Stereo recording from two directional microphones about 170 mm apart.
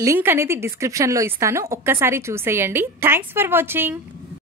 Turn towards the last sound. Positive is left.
turn(degrees=-15)  # may be behind; listen again after turning